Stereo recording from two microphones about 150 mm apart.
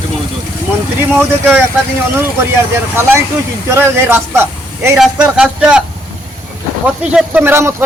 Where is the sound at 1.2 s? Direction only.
10° right (ahead or behind).